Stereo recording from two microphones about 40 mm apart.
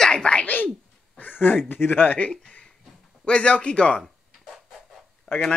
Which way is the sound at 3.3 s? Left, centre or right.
Left.